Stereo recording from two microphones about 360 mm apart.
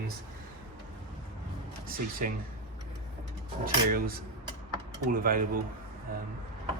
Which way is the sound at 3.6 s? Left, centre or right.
Right.